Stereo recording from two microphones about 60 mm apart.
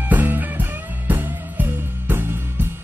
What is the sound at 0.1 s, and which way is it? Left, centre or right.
Music, right.